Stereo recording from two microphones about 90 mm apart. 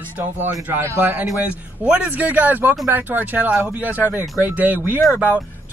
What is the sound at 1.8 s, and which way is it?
Speech, 15° right (ahead or behind).